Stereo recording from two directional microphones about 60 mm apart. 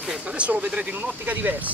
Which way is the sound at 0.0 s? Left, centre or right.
Centre.